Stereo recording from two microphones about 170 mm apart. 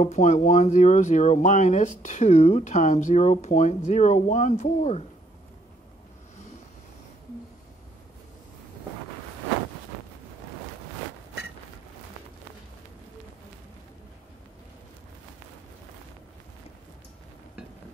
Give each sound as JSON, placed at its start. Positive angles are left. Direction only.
{"t": 0.0, "sound": "speech", "side_deg": 45}